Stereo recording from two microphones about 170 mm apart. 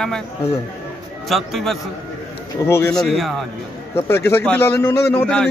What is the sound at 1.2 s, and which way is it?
Speech, centre (ahead or behind).